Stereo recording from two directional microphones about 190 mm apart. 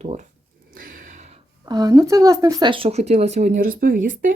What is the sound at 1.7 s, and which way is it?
Speech, 20° right (ahead or behind).